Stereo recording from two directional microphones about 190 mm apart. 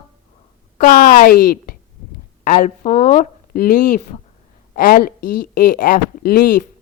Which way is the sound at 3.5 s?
50° left (ahead or behind).